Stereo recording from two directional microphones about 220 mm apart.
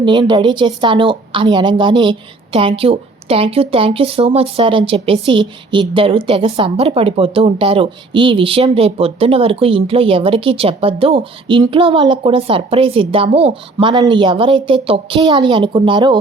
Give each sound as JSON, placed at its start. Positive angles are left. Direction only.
{"t": 0.0, "sound": "a woman's voice", "side_deg": -20}